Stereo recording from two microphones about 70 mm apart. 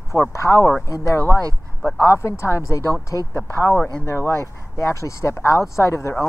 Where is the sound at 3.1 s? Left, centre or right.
Left.